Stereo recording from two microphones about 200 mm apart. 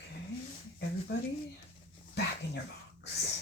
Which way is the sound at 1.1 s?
60° left (ahead or behind).